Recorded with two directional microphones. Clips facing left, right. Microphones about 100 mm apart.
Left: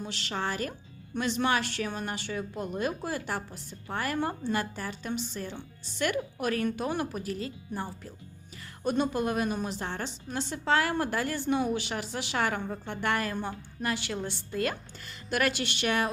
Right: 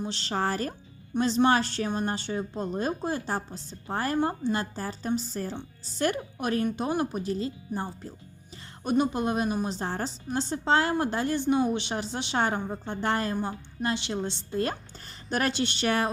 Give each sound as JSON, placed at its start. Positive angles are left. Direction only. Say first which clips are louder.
{"t": 0.0, "sound": "a woman's voice", "louder": "right 4 dB", "side_deg": -30}
{"t": 13.3, "sound": "speech", "louder": "right 3 dB", "side_deg": -20}